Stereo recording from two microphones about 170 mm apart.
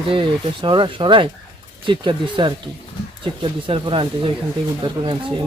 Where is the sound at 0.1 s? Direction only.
30° right (ahead or behind).